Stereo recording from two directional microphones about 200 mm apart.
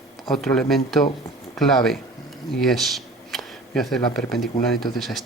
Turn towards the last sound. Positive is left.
turn(degrees=0)  # may be behind; listen again after turning